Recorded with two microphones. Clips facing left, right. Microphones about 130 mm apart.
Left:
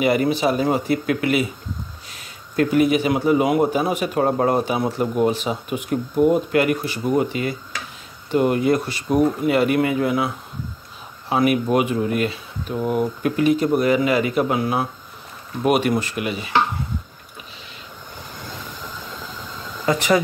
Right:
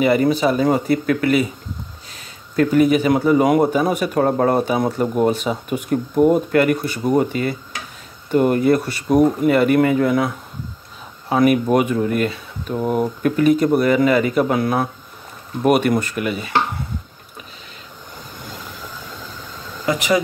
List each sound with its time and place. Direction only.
0.0 s speech: 40° right (ahead or behind)
2.5 s a man's voice: 40° right (ahead or behind)